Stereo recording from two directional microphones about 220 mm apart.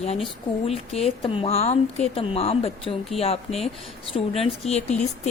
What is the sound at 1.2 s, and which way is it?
A woman's voice, 25° left (ahead or behind).